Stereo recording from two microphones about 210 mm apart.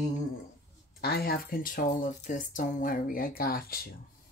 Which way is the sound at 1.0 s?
50° left (ahead or behind).